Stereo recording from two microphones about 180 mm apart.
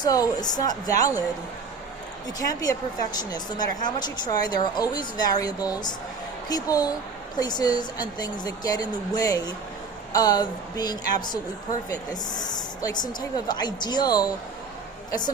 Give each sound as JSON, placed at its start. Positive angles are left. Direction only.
{"t": 0.0, "sound": "speech", "side_deg": 20}
{"t": 2.4, "sound": "speech", "side_deg": 20}